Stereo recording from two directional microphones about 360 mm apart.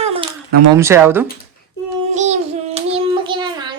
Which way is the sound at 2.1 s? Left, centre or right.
Centre.